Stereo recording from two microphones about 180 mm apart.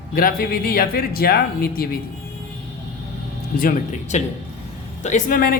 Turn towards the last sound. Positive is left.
turn(degrees=50)  # may be behind; listen again after turning